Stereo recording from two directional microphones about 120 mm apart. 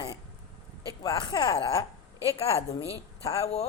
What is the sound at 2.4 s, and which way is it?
Speech, 55° left (ahead or behind).